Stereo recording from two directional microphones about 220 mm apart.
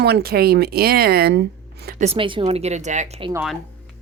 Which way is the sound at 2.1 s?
25° right (ahead or behind).